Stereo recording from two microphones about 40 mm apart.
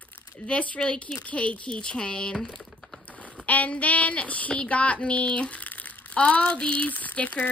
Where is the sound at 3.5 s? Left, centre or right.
Left.